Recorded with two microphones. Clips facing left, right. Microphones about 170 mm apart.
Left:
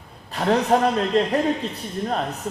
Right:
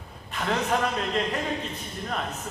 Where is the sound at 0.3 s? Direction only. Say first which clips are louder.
Left 7 dB; 35° left (ahead or behind).